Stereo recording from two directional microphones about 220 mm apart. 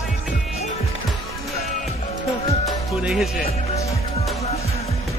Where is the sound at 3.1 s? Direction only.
5° right (ahead or behind).